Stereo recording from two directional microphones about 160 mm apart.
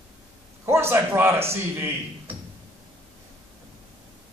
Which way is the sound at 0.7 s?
15° right (ahead or behind).